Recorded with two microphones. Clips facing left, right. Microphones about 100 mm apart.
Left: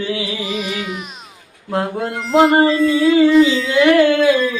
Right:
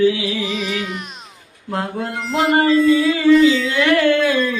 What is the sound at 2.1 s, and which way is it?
Music, centre (ahead or behind).